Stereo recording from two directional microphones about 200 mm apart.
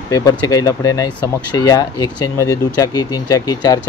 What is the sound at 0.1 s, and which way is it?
Speech, 20° left (ahead or behind).